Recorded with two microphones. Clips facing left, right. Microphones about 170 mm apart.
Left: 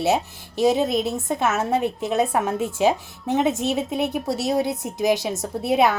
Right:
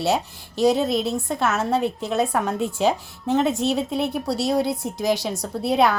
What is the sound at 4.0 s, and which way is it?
Speech, 20° left (ahead or behind).